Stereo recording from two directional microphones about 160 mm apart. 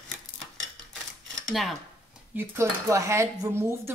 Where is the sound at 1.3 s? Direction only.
Centre (ahead or behind).